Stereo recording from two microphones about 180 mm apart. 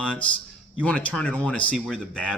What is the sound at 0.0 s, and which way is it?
A man's voice, 5° left (ahead or behind).